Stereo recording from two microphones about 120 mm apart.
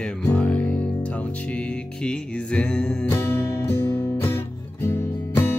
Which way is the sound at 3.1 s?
20° left (ahead or behind).